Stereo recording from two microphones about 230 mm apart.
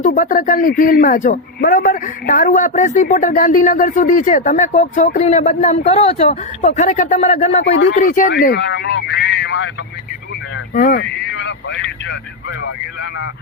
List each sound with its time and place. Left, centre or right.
0.0 s speech: left
10.8 s vehicle: left